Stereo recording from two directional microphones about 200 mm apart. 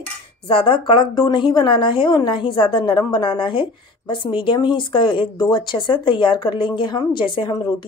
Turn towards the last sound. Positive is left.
turn(degrees=25)  # may be behind; listen again after turning